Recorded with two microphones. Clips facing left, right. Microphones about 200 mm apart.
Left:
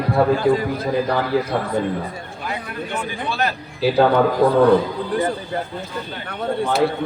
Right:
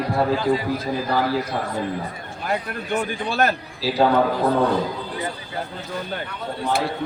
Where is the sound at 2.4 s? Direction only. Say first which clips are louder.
Right 3 dB; 50° right (ahead or behind).